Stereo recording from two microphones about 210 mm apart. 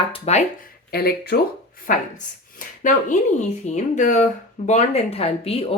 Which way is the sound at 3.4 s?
35° left (ahead or behind).